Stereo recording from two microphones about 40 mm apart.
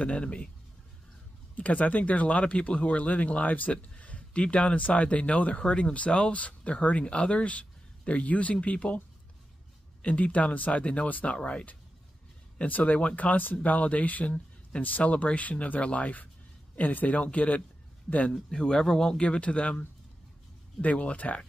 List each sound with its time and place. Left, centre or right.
0.0 s speech: left
1.6 s speech: left
10.0 s speech: left
11.3 s speech: left
12.5 s speech: left
18.5 s speech: centre
20.8 s speech: left